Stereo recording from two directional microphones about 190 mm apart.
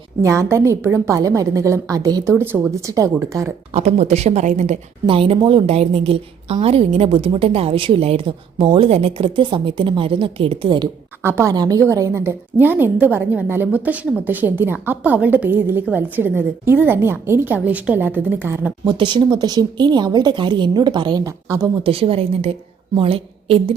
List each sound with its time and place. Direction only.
0.2 s a woman's voice: 15° right (ahead or behind)
3.8 s a woman's voice: 35° right (ahead or behind)
11.2 s a woman's voice: 15° right (ahead or behind)
18.9 s a woman's voice: 25° right (ahead or behind)
21.8 s a woman's voice: 30° right (ahead or behind)